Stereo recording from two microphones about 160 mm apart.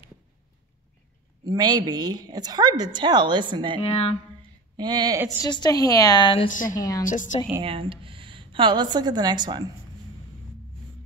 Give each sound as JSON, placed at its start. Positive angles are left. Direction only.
{"t": 1.4, "sound": "a woman's voice", "side_deg": -25}
{"t": 3.8, "sound": "speech", "side_deg": 40}
{"t": 4.4, "sound": "a sound", "side_deg": -25}
{"t": 5.4, "sound": "a woman's voice", "side_deg": 25}
{"t": 6.5, "sound": "a woman's voice", "side_deg": 55}
{"t": 6.8, "sound": "a woman's voice", "side_deg": 25}
{"t": 7.1, "sound": "a woman's voice", "side_deg": 55}
{"t": 7.6, "sound": "a woman's voice", "side_deg": -35}